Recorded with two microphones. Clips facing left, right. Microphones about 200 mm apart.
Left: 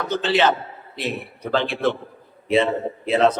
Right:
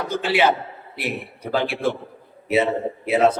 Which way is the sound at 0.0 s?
10° right (ahead or behind).